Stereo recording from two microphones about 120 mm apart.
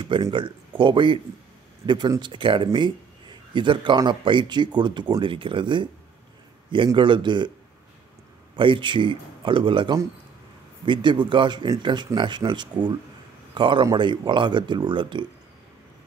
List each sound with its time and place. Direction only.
0.0 s a man's voice: 40° right (ahead or behind)
7.0 s a man's voice: 40° right (ahead or behind)
8.5 s a man's voice: 45° right (ahead or behind)